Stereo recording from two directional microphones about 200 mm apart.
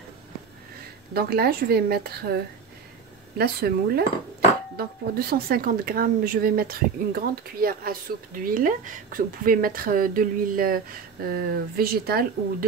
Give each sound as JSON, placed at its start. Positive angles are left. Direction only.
{"t": 1.1, "sound": "speech", "side_deg": -50}
{"t": 3.3, "sound": "speech", "side_deg": -50}